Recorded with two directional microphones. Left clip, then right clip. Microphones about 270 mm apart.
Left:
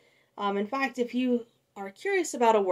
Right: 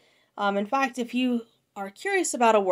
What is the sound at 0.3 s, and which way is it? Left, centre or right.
Speech, right.